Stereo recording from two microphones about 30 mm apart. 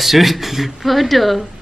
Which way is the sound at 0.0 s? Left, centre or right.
Centre.